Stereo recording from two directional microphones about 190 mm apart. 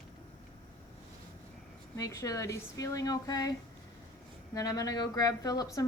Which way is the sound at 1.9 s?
15° left (ahead or behind).